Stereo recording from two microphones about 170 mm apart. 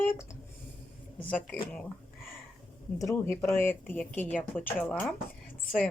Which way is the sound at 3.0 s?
20° left (ahead or behind).